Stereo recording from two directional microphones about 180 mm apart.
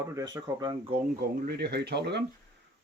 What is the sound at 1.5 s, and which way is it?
Speech, 60° right (ahead or behind).